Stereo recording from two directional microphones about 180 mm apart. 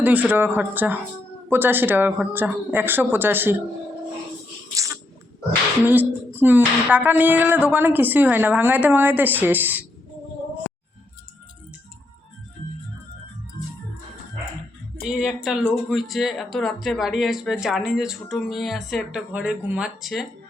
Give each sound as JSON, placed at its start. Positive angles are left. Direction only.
{"t": 0.0, "sound": "speech", "side_deg": -10}
{"t": 4.7, "sound": "a sound", "side_deg": -15}
{"t": 5.8, "sound": "speech", "side_deg": -10}
{"t": 15.0, "sound": "speech", "side_deg": -5}